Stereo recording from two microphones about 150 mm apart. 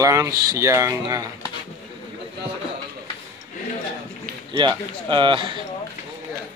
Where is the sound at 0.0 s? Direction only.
20° right (ahead or behind).